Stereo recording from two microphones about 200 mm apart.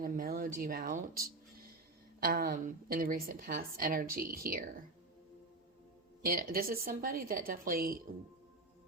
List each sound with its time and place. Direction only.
0.0 s a woman's voice: 45° right (ahead or behind)
6.2 s a woman's voice: 45° right (ahead or behind)